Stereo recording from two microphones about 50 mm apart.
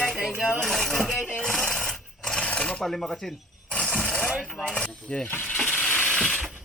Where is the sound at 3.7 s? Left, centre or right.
Left.